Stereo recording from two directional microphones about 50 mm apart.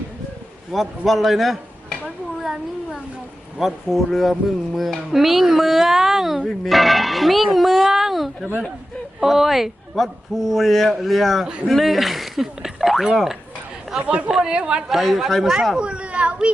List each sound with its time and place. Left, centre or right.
0.7 s speech: centre
3.6 s speech: centre
14.8 s speech: centre
15.8 s speech: right